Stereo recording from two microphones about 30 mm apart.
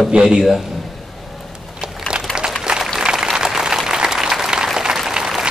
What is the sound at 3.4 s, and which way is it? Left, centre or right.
Applause, centre.